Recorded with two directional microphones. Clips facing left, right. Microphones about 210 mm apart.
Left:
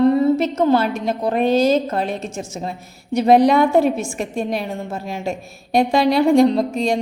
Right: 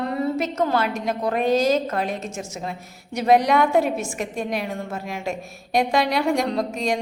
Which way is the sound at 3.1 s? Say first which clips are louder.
Left 5 dB; 30° left (ahead or behind).